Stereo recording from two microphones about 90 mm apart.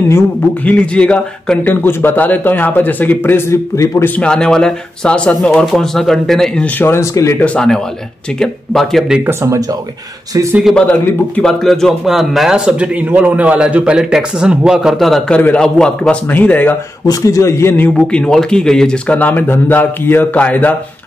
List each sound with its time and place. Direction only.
0.7 s a man's voice: 10° left (ahead or behind); by 4.0 s 35° left (ahead or behind)
4.2 s speech: 10° left (ahead or behind)
6.8 s speech: 30° left (ahead or behind)
7.3 s speech: 15° left (ahead or behind)
9.2 s speech: 30° right (ahead or behind)
10.7 s a man's voice: 10° left (ahead or behind)
15.3 s speech: 10° left (ahead or behind)
17.0 s a man's voice: 40° left (ahead or behind); by 20.7 s 15° left (ahead or behind)